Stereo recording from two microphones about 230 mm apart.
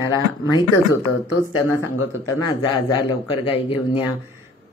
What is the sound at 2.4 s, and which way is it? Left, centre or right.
Speech, centre.